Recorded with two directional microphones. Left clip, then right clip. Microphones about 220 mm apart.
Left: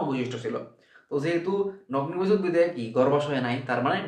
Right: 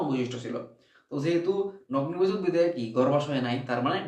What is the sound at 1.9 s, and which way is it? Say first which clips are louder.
Speech: left 2 dB; 15° left (ahead or behind).